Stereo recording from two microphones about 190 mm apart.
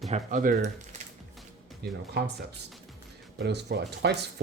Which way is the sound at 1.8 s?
60° right (ahead or behind).